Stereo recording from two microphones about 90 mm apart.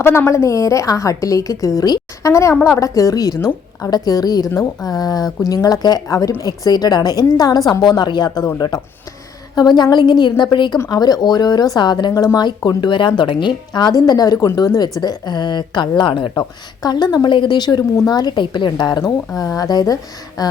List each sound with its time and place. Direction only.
0.0 s a woman's voice: 30° left (ahead or behind); by 8.4 s 55° left (ahead or behind)
9.6 s speech: 50° left (ahead or behind)
10.8 s a woman's voice: 45° left (ahead or behind)
12.1 s a woman's voice: 40° left (ahead or behind)
12.4 s a woman's voice: 55° left (ahead or behind)
16.3 s a woman's voice: 45° left (ahead or behind)
19.4 s a woman's voice: 40° left (ahead or behind)